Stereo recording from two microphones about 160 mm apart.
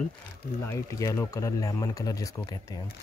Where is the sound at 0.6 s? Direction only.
20° left (ahead or behind).